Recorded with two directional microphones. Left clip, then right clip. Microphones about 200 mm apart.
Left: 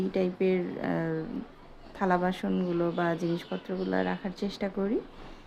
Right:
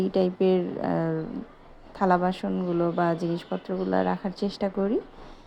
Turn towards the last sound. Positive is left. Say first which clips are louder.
# right 5 dB
turn(degrees=5)  # may be behind; listen again after turning